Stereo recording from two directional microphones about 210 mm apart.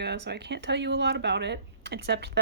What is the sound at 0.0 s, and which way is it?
A woman's voice, 50° right (ahead or behind).